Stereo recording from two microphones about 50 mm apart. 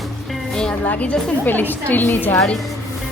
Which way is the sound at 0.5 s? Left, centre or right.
Centre.